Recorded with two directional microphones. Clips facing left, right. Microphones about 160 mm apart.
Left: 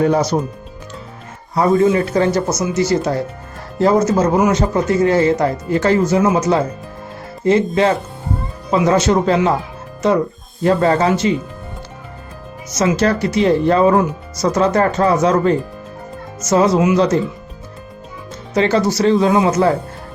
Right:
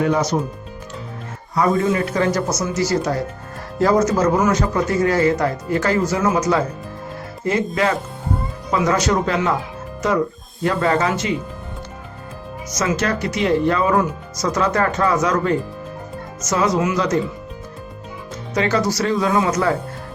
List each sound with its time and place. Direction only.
0.0 s speech: 35° left (ahead or behind)
1.5 s speech: 25° left (ahead or behind)
7.8 s speech: 25° left (ahead or behind)
10.6 s speech: 30° left (ahead or behind)
12.7 s speech: 30° left (ahead or behind)
18.5 s speech: 30° left (ahead or behind)